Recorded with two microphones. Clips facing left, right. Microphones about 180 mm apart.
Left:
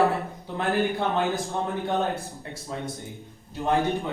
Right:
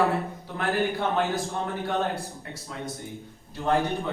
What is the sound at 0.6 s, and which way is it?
Speech, 15° left (ahead or behind).